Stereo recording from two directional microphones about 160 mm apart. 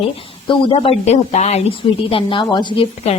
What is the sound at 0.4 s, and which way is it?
Speech, 35° left (ahead or behind).